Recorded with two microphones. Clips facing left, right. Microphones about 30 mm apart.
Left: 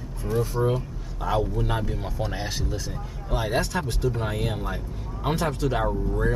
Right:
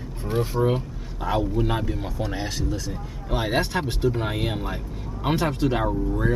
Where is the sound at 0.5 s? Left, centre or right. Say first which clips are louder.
Right 3 dB; right.